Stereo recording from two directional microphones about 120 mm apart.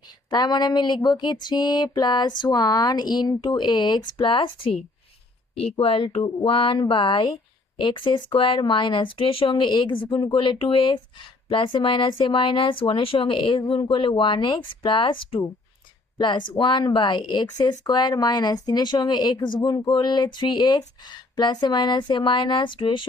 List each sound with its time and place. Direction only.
0.3 s speech: 35° left (ahead or behind)
5.8 s speech: 50° left (ahead or behind)